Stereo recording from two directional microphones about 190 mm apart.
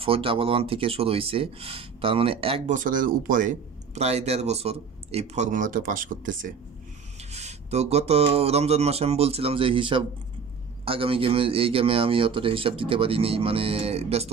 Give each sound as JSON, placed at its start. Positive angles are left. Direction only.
{"t": 0.0, "sound": "speech", "side_deg": -30}
{"t": 2.7, "sound": "speech", "side_deg": -45}
{"t": 7.2, "sound": "a sound", "side_deg": -35}
{"t": 10.9, "sound": "speech", "side_deg": -30}